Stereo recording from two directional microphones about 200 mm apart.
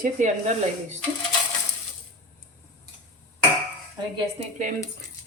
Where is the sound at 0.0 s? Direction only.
40° right (ahead or behind).